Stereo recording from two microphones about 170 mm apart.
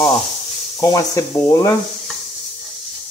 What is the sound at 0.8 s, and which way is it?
Speech, 20° left (ahead or behind).